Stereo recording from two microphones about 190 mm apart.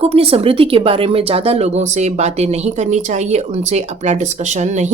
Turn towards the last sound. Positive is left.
turn(degrees=-40)  # may be behind; listen again after turning